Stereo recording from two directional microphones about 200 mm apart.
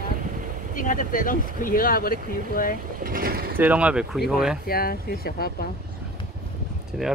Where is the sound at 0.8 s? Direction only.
40° left (ahead or behind).